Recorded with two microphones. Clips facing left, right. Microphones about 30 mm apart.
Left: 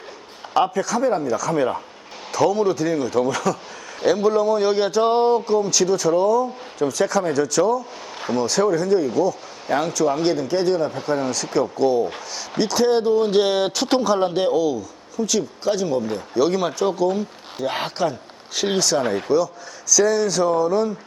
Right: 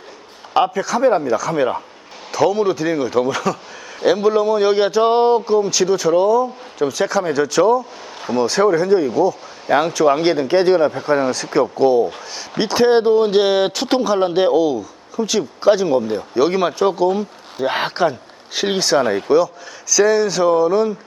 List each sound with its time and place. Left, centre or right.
0.7 s a man's voice: centre
1.0 s a man's voice: right
11.1 s a man's voice: right